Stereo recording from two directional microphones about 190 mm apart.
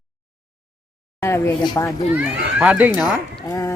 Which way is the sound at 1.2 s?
15° left (ahead or behind).